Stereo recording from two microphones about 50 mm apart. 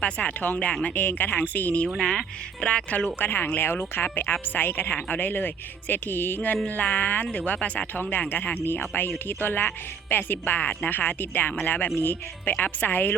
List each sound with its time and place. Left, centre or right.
0.0 s speech: left
0.7 s speech: centre
0.9 s speech: left
2.0 s speech: centre
2.6 s speech: left
3.2 s speech: left